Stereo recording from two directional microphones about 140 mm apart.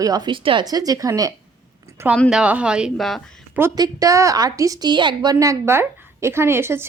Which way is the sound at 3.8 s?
25° right (ahead or behind).